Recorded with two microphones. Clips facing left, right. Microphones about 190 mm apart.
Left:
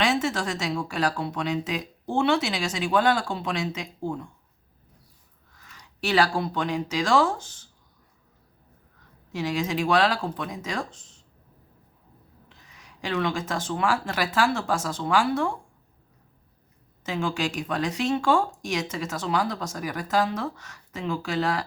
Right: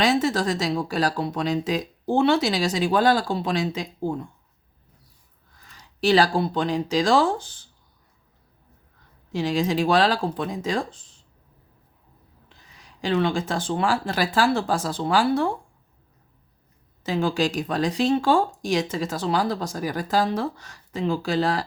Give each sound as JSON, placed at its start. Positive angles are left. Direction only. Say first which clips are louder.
{"t": 0.0, "sound": "speech", "louder": "right 4 dB", "side_deg": -35}
{"t": 5.5, "sound": "speech", "louder": "right 6 dB", "side_deg": -30}
{"t": 9.3, "sound": "speech", "louder": "right 4 dB", "side_deg": -30}
{"t": 12.5, "sound": "speech", "louder": "right 4 dB", "side_deg": -35}
{"t": 17.0, "sound": "speech", "louder": "right 5 dB", "side_deg": -35}